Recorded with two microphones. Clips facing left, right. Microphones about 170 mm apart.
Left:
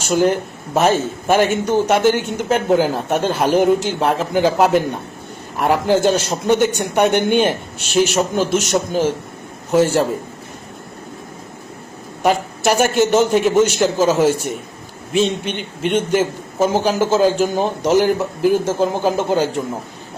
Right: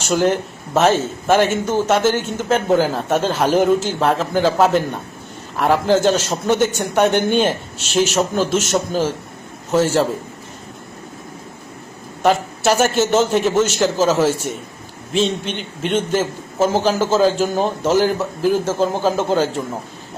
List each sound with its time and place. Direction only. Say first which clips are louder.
0.0 s a man's voice: left 1 dB; 10° left (ahead or behind)
9.7 s a man's voice: left 1 dB; 15° left (ahead or behind)
12.2 s a man's voice: even; 15° left (ahead or behind)
15.2 s a man's voice: left 1 dB; 55° left (ahead or behind)
15.9 s a man's voice: left 2 dB; 15° left (ahead or behind)